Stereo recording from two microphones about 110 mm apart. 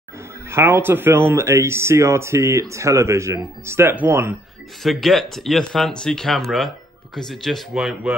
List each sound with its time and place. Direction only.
0.5 s speech: 25° right (ahead or behind)
4.8 s speech: centre (ahead or behind)